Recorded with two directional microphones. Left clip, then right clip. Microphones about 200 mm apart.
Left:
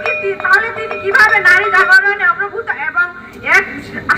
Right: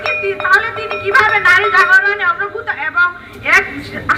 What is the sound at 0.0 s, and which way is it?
Music, 50° left (ahead or behind).